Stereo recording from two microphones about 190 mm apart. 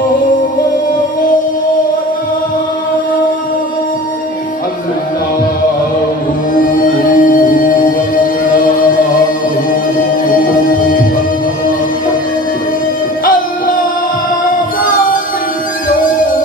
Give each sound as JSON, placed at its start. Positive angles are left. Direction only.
{"t": 6.8, "sound": "music", "side_deg": 45}